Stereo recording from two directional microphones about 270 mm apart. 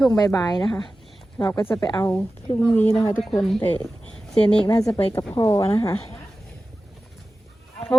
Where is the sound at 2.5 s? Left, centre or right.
Left.